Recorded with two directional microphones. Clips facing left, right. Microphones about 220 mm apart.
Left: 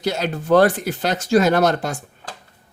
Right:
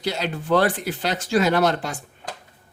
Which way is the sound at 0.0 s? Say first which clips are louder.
Left 3 dB; 45° left (ahead or behind).